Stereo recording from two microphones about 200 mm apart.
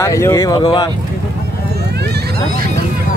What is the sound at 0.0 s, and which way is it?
Speech, 15° left (ahead or behind).